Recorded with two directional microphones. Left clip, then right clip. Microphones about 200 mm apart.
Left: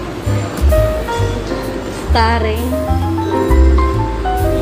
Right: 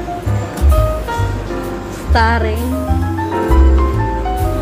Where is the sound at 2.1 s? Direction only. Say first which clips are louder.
Even; 20° right (ahead or behind).